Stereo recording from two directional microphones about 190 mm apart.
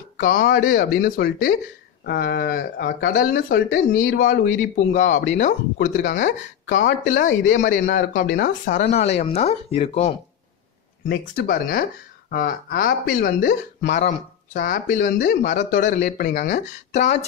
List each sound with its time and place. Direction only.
0.2 s speech: 50° left (ahead or behind)
7.6 s speech: 60° left (ahead or behind); by 10.1 s 35° left (ahead or behind)
11.1 s speech: 50° left (ahead or behind)